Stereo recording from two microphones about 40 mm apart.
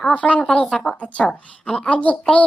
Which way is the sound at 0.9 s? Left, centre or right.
Left.